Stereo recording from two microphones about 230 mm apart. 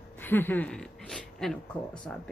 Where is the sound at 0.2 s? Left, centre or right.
Centre.